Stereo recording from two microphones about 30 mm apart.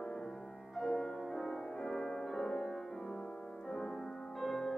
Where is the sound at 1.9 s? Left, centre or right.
Centre.